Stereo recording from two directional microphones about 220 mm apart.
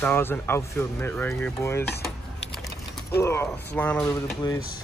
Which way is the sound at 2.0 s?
Centre (ahead or behind).